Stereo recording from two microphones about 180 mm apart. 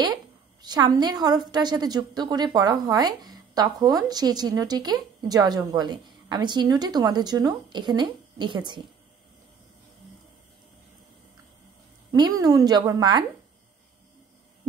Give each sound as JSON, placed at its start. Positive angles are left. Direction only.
{"t": 0.0, "sound": "a woman's voice", "side_deg": -25}
{"t": 12.1, "sound": "a woman's voice", "side_deg": -20}